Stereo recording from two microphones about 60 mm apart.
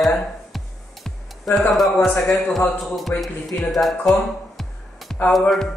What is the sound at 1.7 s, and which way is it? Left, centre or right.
Speech, centre.